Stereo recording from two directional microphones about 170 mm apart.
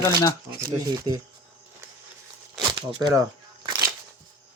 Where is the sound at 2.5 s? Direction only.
25° right (ahead or behind).